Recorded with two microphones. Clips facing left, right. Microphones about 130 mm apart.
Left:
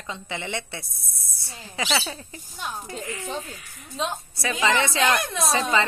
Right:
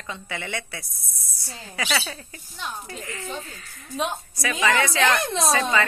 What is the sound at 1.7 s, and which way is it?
A woman's voice, 20° left (ahead or behind).